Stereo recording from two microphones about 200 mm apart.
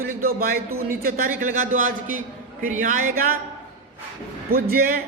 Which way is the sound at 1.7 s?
40° right (ahead or behind).